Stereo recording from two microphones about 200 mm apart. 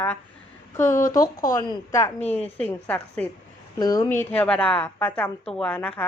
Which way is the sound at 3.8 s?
20° left (ahead or behind).